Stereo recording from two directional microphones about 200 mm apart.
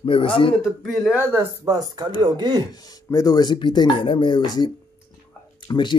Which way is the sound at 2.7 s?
20° left (ahead or behind).